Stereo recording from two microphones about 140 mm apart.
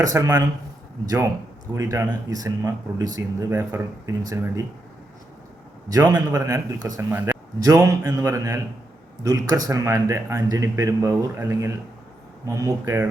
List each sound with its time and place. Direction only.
0.0 s speech: 25° right (ahead or behind)
6.1 s speech: 25° right (ahead or behind)